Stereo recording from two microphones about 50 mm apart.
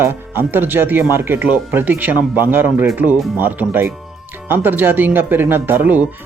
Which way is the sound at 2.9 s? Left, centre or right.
Right.